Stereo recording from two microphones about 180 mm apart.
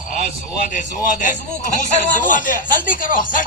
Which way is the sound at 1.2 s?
45° left (ahead or behind).